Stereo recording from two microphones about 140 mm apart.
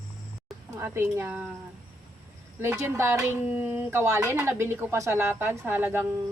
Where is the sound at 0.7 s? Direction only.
20° right (ahead or behind).